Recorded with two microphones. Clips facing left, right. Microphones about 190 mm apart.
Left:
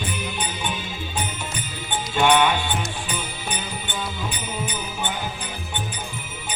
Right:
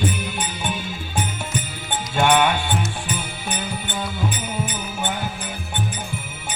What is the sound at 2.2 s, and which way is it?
Music, 50° right (ahead or behind).